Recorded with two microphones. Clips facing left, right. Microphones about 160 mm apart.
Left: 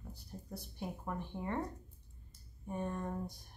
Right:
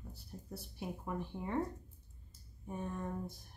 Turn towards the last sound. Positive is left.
turn(degrees=-5)  # may be behind; listen again after turning